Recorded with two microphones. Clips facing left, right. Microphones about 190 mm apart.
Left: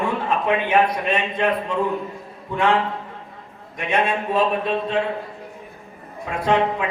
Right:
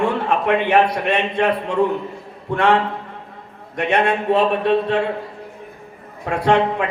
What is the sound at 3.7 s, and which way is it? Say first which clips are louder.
A man's voice: right 4 dB; 70° right (ahead or behind).